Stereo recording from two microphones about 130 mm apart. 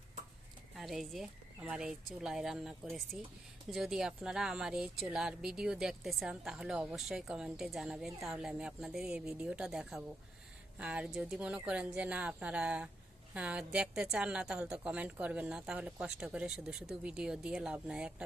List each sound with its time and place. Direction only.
0.8 s a woman's voice: centre (ahead or behind)